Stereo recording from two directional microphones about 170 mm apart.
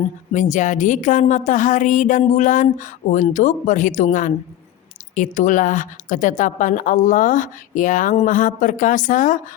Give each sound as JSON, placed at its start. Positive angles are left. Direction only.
{"t": 0.3, "sound": "a woman's voice", "side_deg": 45}